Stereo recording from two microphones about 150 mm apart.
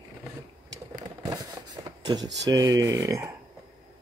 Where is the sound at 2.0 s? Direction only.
30° right (ahead or behind).